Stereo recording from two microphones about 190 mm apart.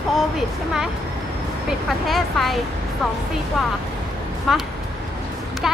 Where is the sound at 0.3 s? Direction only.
Centre (ahead or behind).